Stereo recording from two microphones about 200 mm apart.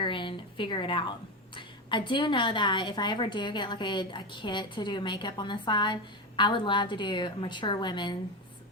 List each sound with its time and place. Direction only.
0.0 s a woman's voice: 25° left (ahead or behind)